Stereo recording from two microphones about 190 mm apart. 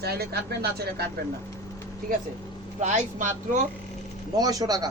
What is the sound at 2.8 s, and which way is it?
Speech, 40° right (ahead or behind).